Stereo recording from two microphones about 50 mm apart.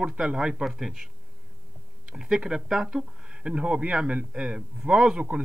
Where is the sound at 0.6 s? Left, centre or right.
Centre.